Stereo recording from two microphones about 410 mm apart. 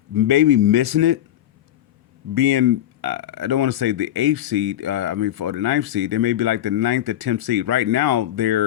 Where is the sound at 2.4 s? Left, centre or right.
Right.